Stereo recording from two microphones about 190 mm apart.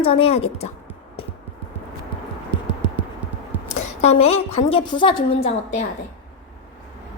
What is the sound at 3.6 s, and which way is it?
A woman's voice, 35° left (ahead or behind).